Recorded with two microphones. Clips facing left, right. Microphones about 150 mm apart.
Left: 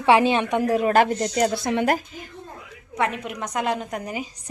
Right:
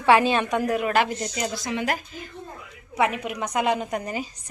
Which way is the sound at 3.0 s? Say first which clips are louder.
Right 1 dB; 5° right (ahead or behind).